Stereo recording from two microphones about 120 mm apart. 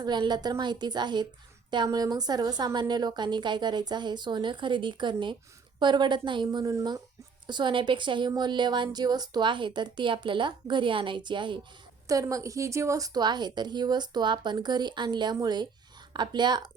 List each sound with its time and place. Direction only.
0.0 s a woman's voice: 35° right (ahead or behind)
7.4 s a woman's voice: 40° right (ahead or behind)
12.0 s a woman's voice: 30° right (ahead or behind)